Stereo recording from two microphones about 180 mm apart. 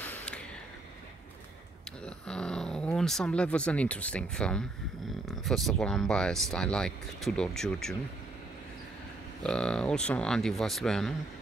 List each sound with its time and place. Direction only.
0.0 s a sound: 10° left (ahead or behind)
2.0 s speech: 5° left (ahead or behind)
9.4 s speech: 5° left (ahead or behind)